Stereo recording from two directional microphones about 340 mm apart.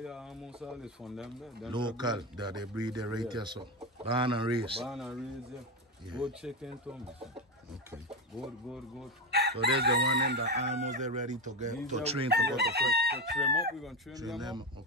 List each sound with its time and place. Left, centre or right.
0.0 s speech: centre
1.7 s speech: centre
4.8 s speech: centre
6.1 s speech: centre
9.3 s crowing: right
12.3 s crowing: right
13.4 s speech: centre